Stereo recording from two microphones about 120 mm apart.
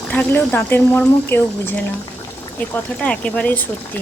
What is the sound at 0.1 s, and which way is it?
Speech, 15° left (ahead or behind).